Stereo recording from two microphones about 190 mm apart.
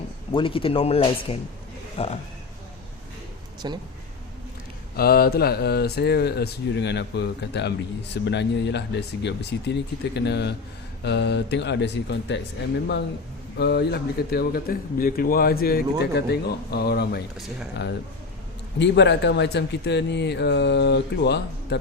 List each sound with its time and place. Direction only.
0.3 s speech: 25° left (ahead or behind)
3.6 s speech: 25° right (ahead or behind)
4.9 s speech: 55° left (ahead or behind)
13.6 s speech: 60° left (ahead or behind)
18.8 s speech: 65° left (ahead or behind)